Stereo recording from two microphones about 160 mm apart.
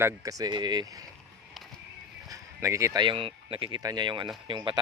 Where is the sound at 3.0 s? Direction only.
35° right (ahead or behind).